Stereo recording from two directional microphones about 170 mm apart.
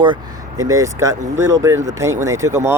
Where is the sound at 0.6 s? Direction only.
20° right (ahead or behind).